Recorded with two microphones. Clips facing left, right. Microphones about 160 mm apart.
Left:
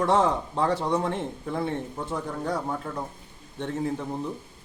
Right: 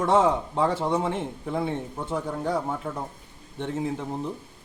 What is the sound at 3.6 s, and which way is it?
Speech, 10° right (ahead or behind).